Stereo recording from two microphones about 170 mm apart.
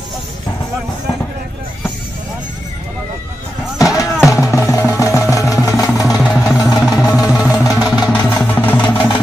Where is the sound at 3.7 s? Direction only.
20° left (ahead or behind).